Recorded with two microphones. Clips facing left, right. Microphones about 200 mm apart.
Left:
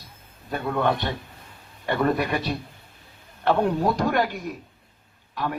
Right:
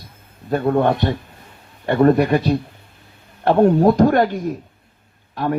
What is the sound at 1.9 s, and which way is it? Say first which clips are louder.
Speech: right 9 dB; 45° right (ahead or behind).